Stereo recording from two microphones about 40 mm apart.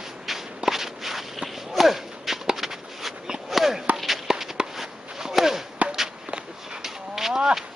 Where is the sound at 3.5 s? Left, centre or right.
Centre.